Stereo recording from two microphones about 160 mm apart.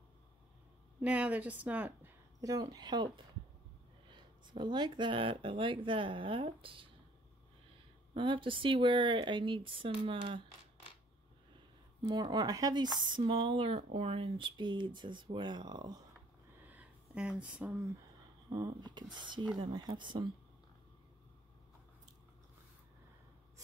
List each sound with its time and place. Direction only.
1.0 s speech: 10° right (ahead or behind)
2.4 s speech: 20° right (ahead or behind)
4.1 s speech: 30° right (ahead or behind)
8.1 s speech: 30° right (ahead or behind)
12.0 s speech: 25° right (ahead or behind)
16.6 s a sound: 10° right (ahead or behind)
18.5 s speech: 25° right (ahead or behind)